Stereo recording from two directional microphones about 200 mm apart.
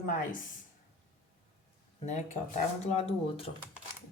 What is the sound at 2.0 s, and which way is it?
A woman's voice, 35° left (ahead or behind).